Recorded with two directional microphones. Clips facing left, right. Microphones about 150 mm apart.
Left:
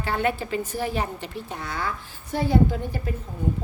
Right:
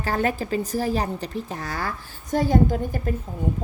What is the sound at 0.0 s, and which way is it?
A woman's voice, 40° right (ahead or behind).